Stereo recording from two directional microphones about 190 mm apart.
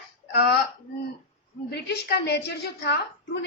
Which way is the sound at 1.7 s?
60° left (ahead or behind).